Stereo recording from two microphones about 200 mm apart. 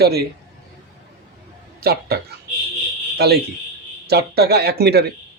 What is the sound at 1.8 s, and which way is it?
Speech, 50° right (ahead or behind).